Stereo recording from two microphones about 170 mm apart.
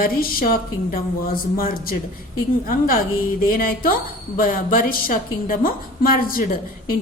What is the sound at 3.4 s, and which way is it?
A woman's voice, 60° left (ahead or behind).